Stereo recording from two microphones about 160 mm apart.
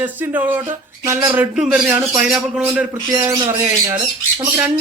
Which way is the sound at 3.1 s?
20° right (ahead or behind).